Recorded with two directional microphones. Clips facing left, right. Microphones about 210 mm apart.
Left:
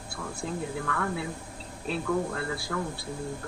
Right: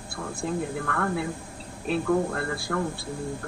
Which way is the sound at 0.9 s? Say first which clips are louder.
Right 3 dB; 55° right (ahead or behind).